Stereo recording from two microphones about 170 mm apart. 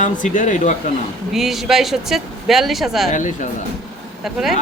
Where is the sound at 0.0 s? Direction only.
50° left (ahead or behind).